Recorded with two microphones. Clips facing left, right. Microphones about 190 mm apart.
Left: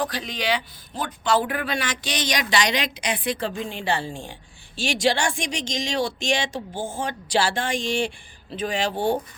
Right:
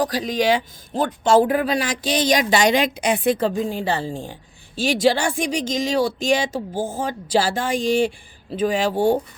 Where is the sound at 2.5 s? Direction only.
45° right (ahead or behind).